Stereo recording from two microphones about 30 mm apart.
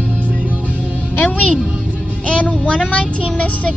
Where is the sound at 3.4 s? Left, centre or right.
Left.